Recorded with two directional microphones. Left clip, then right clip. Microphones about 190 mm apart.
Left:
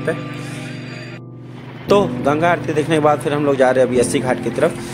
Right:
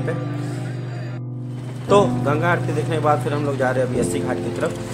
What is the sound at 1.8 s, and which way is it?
Speech, 40° left (ahead or behind).